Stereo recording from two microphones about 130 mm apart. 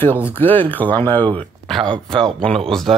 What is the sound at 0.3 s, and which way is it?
Speech, 15° left (ahead or behind).